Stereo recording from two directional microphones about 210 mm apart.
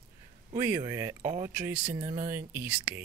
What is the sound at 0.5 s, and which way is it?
Speech, 15° right (ahead or behind).